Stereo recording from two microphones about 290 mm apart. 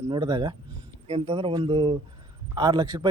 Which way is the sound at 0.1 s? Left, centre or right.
Centre.